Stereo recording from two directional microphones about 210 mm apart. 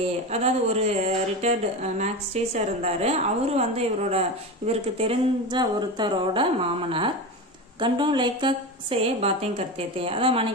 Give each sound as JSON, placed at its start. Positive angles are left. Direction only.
{"t": 0.0, "sound": "a woman's voice", "side_deg": -30}